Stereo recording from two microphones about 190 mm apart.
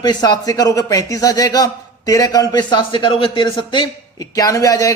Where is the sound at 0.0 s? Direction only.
20° left (ahead or behind).